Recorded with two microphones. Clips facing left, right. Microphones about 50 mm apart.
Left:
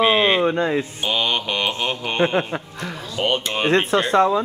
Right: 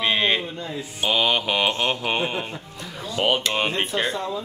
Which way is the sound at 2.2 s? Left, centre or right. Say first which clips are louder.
Left 7 dB; left.